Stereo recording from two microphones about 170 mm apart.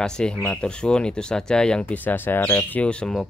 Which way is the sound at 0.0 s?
5° left (ahead or behind).